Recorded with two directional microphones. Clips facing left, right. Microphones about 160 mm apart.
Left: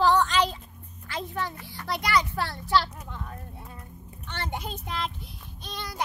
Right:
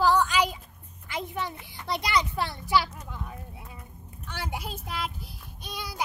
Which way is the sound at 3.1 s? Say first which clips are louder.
Even; 10° right (ahead or behind).